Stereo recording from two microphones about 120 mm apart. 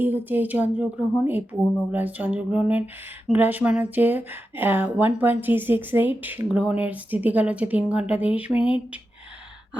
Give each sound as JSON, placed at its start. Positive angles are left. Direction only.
{"t": 0.0, "sound": "speech", "side_deg": -15}